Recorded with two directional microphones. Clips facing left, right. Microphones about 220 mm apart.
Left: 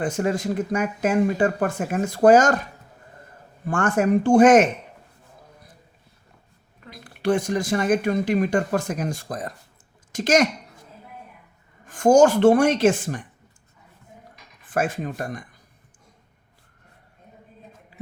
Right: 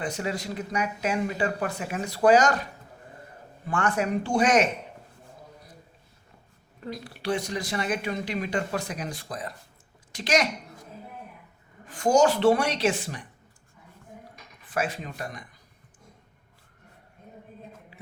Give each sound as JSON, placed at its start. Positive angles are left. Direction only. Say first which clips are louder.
{"t": 0.0, "sound": "speech", "louder": "left 7 dB", "side_deg": 50}
{"t": 3.7, "sound": "speech", "louder": "left 6 dB", "side_deg": 50}
{"t": 6.9, "sound": "speech", "louder": "left 7 dB", "side_deg": 50}
{"t": 11.9, "sound": "speech", "louder": "left 6 dB", "side_deg": 50}
{"t": 14.7, "sound": "speech", "louder": "left 5 dB", "side_deg": 50}